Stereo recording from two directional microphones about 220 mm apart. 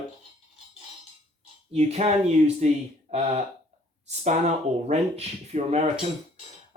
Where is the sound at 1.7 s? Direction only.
30° right (ahead or behind).